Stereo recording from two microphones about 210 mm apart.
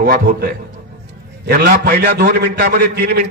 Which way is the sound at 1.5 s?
50° right (ahead or behind).